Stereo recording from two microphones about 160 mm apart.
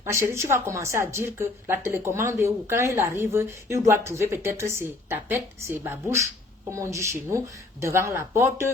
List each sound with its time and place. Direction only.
0.0 s a woman's voice: 15° right (ahead or behind)